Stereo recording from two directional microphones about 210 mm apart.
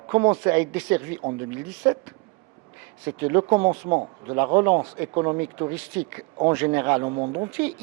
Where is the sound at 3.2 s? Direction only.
20° right (ahead or behind).